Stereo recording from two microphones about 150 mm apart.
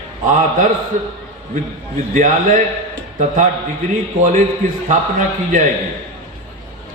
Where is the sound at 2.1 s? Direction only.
60° right (ahead or behind).